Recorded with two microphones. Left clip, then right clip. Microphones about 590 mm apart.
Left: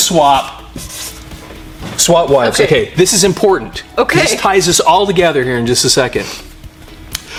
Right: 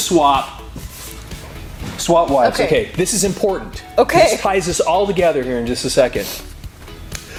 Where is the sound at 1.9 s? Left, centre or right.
Left.